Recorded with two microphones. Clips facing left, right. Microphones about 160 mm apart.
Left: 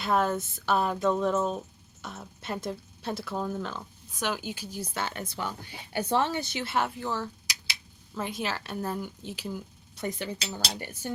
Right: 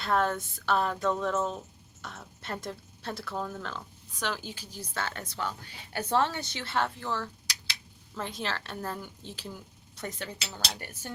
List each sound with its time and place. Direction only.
0.0 s a woman's voice: 10° left (ahead or behind)
10.8 s cutlery: 20° left (ahead or behind)